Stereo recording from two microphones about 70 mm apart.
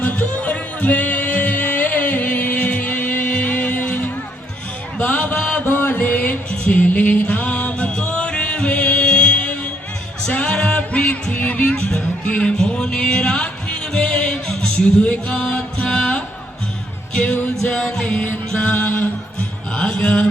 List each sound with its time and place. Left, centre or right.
0.0 s music: left
4.9 s a sound: centre
5.6 s music: left; by 16.2 s centre
17.7 s music: centre
18.0 s music: centre